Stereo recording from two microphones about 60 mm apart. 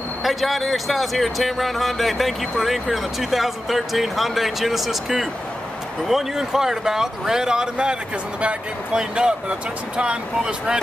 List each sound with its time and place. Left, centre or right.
0.2 s speech: centre